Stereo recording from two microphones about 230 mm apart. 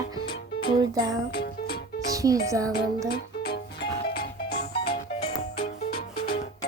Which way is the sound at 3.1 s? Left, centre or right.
Left.